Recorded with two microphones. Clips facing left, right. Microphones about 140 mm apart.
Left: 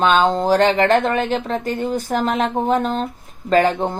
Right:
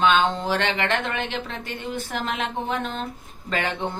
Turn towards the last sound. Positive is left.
turn(degrees=40)  # may be behind; listen again after turning